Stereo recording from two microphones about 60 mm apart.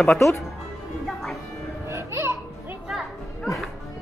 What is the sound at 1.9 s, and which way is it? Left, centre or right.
Music, right.